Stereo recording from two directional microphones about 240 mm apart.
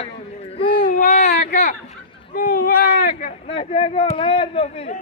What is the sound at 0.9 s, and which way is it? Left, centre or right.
Baby cry, left.